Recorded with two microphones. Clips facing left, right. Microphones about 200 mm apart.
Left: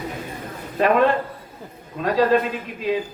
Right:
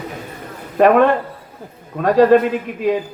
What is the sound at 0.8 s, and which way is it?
A man's voice, 55° right (ahead or behind).